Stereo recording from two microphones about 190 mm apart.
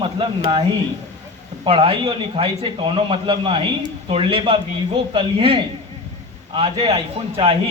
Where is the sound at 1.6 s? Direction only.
30° right (ahead or behind).